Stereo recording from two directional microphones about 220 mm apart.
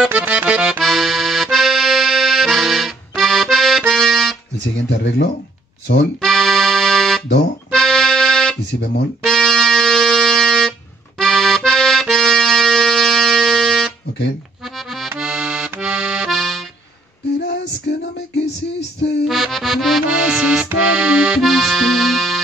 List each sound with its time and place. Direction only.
0.0 s accordion: 5° right (ahead or behind)
4.8 s speech: 50° left (ahead or behind)
6.2 s accordion: centre (ahead or behind)
9.2 s music: centre (ahead or behind)
11.1 s accordion: centre (ahead or behind)
17.9 s music: 50° left (ahead or behind)
19.2 s accordion: centre (ahead or behind)